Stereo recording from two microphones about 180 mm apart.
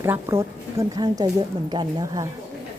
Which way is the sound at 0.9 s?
20° right (ahead or behind).